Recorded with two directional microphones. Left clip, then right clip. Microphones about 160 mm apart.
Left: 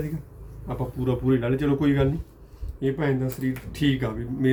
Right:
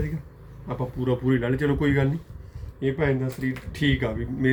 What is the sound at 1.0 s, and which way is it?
Speech, 10° left (ahead or behind).